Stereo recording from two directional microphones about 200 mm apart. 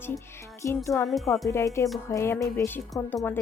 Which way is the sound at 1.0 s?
Centre (ahead or behind).